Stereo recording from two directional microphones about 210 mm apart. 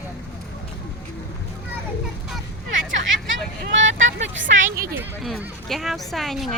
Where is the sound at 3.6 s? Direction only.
60° right (ahead or behind).